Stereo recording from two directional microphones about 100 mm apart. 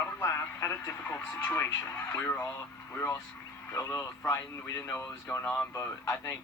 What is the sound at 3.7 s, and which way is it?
Speech, 25° left (ahead or behind).